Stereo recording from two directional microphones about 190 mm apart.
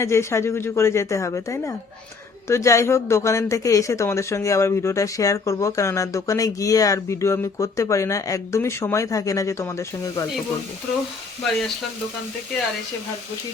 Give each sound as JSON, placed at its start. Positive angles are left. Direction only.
{"t": 0.0, "sound": "speech", "side_deg": 15}